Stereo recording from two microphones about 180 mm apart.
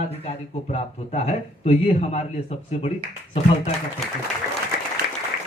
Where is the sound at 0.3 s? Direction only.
35° left (ahead or behind).